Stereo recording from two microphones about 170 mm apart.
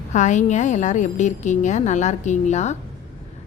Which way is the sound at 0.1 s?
45° left (ahead or behind).